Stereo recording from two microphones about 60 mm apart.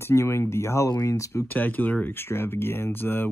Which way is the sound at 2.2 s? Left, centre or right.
Left.